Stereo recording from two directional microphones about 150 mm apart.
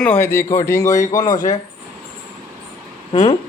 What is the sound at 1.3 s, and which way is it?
Speech, 60° left (ahead or behind).